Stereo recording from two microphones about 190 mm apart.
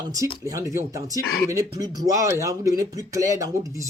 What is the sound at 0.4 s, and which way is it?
Speech, 20° right (ahead or behind).